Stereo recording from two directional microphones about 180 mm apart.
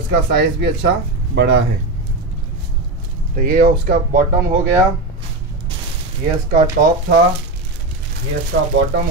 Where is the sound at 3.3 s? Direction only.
50° right (ahead or behind).